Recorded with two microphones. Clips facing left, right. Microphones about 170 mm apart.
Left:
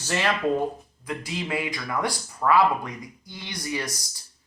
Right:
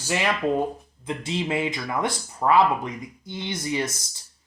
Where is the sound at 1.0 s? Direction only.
25° right (ahead or behind).